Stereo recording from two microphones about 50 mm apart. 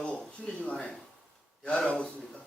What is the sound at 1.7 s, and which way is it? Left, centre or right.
Speech, centre.